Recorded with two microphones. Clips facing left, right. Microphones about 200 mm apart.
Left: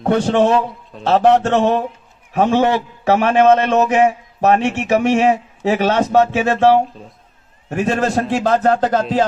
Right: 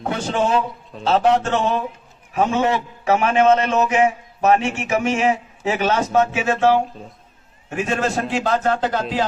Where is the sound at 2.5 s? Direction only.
35° left (ahead or behind).